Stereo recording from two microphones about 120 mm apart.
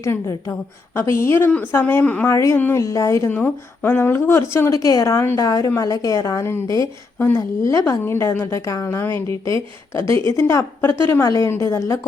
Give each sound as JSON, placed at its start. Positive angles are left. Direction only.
{"t": 0.0, "sound": "a woman's voice", "side_deg": 25}
{"t": 2.3, "sound": "a woman's voice", "side_deg": 25}